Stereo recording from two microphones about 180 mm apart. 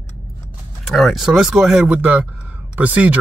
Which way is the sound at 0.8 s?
Centre (ahead or behind).